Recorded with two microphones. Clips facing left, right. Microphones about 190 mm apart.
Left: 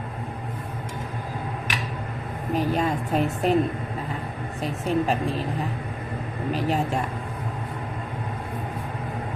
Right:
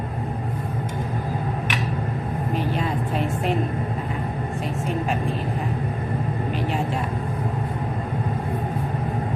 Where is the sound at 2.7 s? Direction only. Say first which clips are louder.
Left 1 dB; 45° left (ahead or behind).